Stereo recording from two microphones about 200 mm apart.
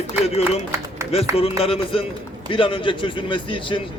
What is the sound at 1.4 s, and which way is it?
A man's voice, 30° left (ahead or behind).